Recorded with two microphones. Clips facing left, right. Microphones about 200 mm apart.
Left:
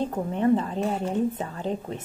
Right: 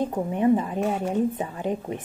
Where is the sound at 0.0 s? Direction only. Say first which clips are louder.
Right 2 dB; 10° right (ahead or behind).